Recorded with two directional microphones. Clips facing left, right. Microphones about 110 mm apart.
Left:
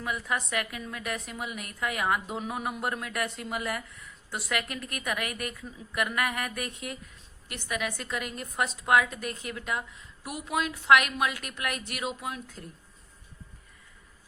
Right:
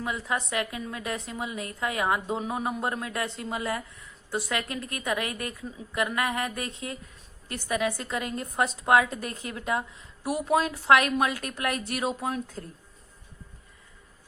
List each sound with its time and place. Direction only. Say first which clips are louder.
0.0 s a woman's voice: right 2 dB; 25° right (ahead or behind)